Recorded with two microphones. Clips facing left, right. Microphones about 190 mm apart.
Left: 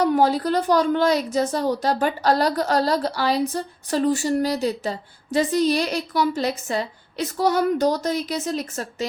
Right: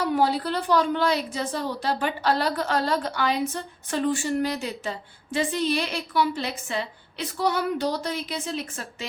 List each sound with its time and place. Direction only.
0.0 s a woman's voice: 45° left (ahead or behind)